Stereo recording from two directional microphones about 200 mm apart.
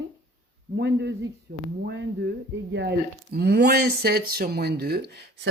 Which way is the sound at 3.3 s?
50° right (ahead or behind).